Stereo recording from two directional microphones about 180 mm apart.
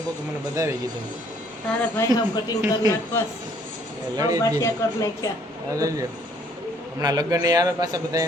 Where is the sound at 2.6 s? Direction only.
20° right (ahead or behind).